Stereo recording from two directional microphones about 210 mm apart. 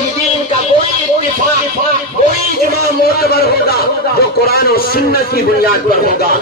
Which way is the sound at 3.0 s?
45° left (ahead or behind).